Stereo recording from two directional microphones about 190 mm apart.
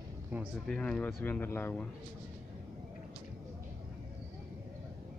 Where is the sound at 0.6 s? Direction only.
5° left (ahead or behind).